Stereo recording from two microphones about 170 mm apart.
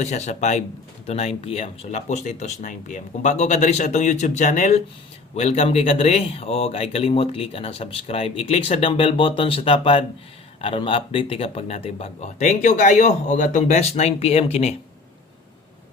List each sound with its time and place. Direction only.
0.0 s speech: 40° left (ahead or behind)